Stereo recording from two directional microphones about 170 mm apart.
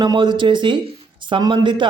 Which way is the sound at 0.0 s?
25° right (ahead or behind).